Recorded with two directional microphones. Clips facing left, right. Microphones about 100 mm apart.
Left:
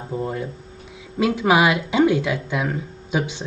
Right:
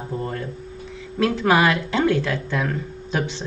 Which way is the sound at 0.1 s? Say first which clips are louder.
Left 3 dB; 10° left (ahead or behind).